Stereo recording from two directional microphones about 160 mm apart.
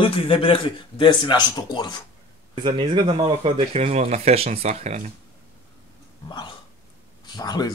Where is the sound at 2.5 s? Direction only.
30° right (ahead or behind); by 5.1 s 45° right (ahead or behind).